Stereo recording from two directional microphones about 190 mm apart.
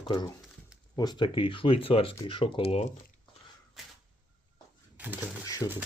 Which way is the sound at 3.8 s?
Centre (ahead or behind).